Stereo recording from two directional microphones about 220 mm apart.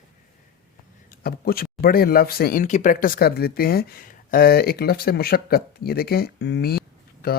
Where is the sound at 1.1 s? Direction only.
40° left (ahead or behind).